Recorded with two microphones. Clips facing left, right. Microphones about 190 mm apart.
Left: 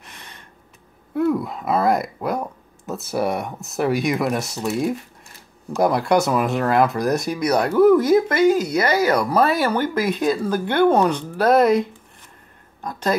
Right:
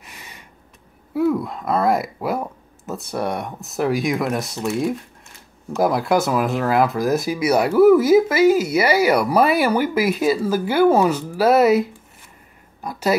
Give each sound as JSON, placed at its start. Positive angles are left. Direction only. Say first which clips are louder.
{"t": 0.0, "sound": "gasp", "louder": "right 1 dB", "side_deg": -5}
{"t": 1.1, "sound": "speech", "louder": "right 1 dB", "side_deg": 0}